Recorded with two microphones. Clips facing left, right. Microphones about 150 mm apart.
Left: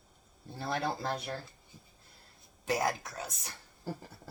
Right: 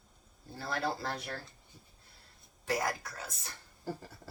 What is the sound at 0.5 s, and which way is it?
Speech, 20° left (ahead or behind).